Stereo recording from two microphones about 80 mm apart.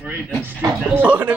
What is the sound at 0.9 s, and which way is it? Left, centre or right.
Speech, right.